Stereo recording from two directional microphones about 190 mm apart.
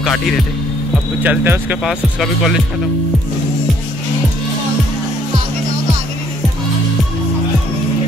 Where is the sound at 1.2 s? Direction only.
10° right (ahead or behind).